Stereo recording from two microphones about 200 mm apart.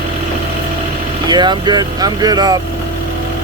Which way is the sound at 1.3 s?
20° right (ahead or behind).